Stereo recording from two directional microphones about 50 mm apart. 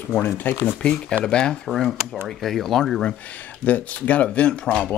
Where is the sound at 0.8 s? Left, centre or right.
Left.